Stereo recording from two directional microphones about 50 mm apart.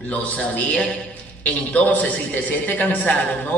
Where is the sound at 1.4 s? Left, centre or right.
Left.